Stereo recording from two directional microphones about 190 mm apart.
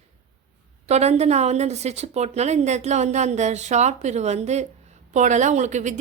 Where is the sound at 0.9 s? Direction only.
35° right (ahead or behind).